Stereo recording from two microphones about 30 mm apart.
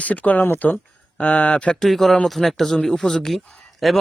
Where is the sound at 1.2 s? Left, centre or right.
Left.